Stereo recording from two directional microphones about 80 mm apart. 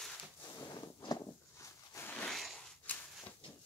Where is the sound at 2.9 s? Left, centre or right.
Left.